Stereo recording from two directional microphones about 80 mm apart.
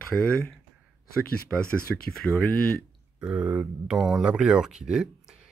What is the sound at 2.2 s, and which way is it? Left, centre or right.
Speech, centre.